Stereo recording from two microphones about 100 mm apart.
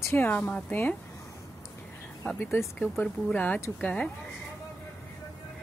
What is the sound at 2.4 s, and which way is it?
A woman's voice, 25° left (ahead or behind).